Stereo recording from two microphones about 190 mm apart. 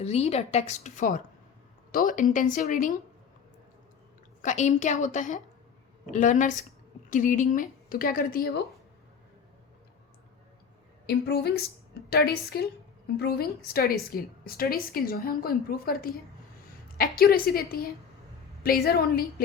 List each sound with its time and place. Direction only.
0.0 s a woman's voice: 35° left (ahead or behind)
4.4 s a woman's voice: 40° left (ahead or behind)
11.0 s a woman's voice: 55° left (ahead or behind)